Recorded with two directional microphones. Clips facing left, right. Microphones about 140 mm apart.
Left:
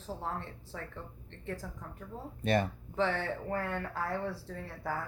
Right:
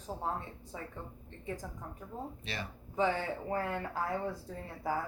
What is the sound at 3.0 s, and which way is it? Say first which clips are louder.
Speech: right 1 dB; 10° right (ahead or behind).